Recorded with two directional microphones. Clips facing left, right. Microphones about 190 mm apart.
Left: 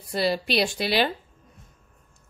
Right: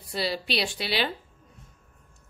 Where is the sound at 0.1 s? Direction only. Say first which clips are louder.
Left 5 dB; 50° left (ahead or behind).